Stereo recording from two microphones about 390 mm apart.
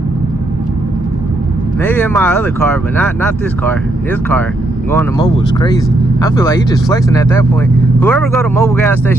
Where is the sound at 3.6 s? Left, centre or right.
Centre.